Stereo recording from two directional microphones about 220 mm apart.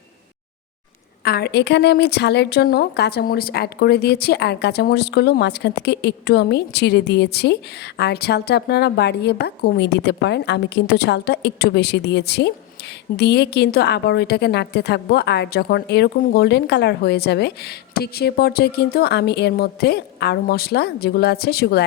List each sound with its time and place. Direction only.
1.2 s a woman's voice: 45° left (ahead or behind)